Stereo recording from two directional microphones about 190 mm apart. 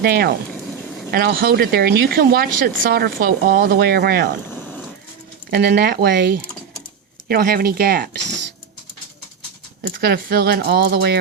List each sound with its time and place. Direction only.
0.0 s speech: 55° right (ahead or behind)
4.4 s vehicle: 10° left (ahead or behind)
5.5 s speech: 55° right (ahead or behind)
9.8 s speech: 55° right (ahead or behind)